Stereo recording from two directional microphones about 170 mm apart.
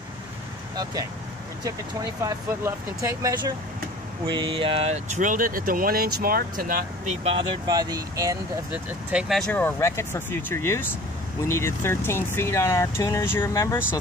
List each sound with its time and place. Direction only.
2.2 s speech: 15° right (ahead or behind); by 7.2 s 55° right (ahead or behind)
7.2 s speech: 25° right (ahead or behind)
8.7 s speech: 5° right (ahead or behind); by 13.9 s 15° left (ahead or behind)